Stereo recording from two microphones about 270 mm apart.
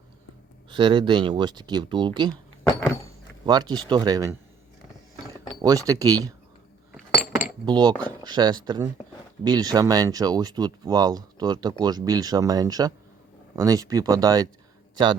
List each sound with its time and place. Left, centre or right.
0.7 s speech: centre
3.4 s speech: centre
5.6 s speech: centre
6.9 s cutlery: centre
7.6 s a man's voice: centre